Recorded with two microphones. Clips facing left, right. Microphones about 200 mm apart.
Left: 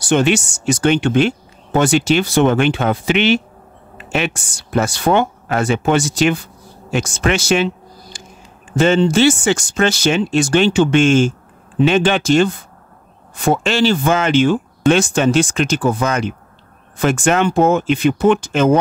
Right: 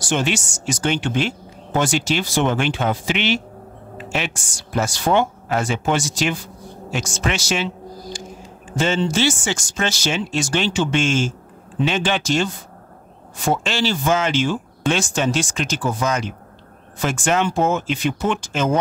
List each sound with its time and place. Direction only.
0.1 s speech: 60° left (ahead or behind)